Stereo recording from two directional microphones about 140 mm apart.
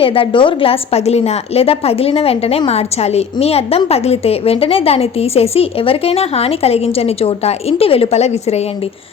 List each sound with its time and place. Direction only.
0.0 s a woman's voice: 40° left (ahead or behind)